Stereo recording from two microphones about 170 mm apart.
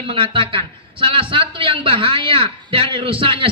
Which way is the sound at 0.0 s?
30° right (ahead or behind).